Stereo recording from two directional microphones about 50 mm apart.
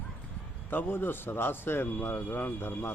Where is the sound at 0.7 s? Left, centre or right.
Left.